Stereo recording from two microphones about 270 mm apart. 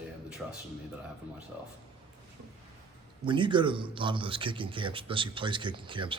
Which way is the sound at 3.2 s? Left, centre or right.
Centre.